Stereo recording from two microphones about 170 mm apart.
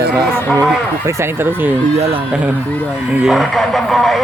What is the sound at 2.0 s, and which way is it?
Speech, 30° right (ahead or behind).